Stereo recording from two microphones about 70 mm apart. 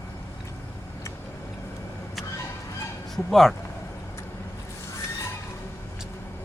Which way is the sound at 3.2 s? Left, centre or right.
Centre.